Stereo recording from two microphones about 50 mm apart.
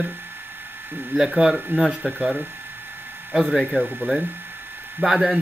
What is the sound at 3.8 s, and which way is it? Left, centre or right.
Speech, right.